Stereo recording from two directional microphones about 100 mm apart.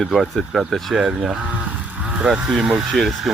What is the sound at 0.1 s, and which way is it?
Speech, centre (ahead or behind).